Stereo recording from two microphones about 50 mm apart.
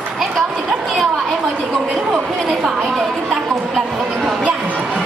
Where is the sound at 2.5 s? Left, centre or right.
Centre.